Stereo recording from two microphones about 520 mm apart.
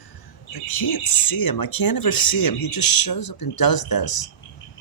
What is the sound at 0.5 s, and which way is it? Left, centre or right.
Speech, left.